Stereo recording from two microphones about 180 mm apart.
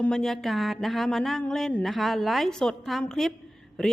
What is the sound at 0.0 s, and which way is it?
A woman's voice, 5° left (ahead or behind).